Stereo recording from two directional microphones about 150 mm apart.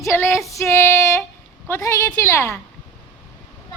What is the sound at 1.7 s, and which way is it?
Speech, 20° left (ahead or behind).